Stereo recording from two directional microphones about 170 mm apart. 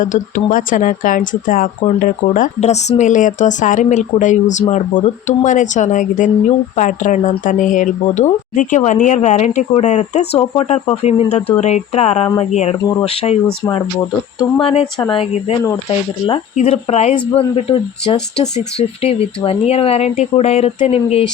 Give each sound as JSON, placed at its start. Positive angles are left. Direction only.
{"t": 0.0, "sound": "speech", "side_deg": 50}
{"t": 14.6, "sound": "speech", "side_deg": 35}
{"t": 19.5, "sound": "speech", "side_deg": 35}